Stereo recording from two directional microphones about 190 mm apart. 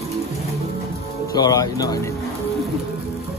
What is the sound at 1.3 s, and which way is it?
Speech, 20° left (ahead or behind).